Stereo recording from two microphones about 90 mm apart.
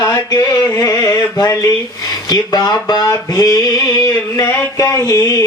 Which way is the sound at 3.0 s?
40° left (ahead or behind).